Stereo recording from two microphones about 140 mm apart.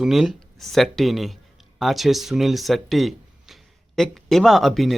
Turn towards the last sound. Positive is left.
turn(degrees=0)  # may be behind; listen again after turning